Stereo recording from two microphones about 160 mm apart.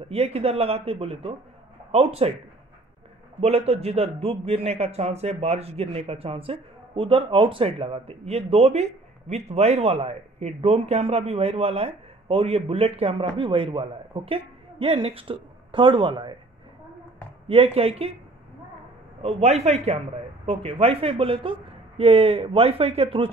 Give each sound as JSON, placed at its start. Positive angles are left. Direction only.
{"t": 0.1, "sound": "a man's voice", "side_deg": -40}
{"t": 3.3, "sound": "a man's voice", "side_deg": -40}
{"t": 17.5, "sound": "a man's voice", "side_deg": -40}
{"t": 19.2, "sound": "a man's voice", "side_deg": -40}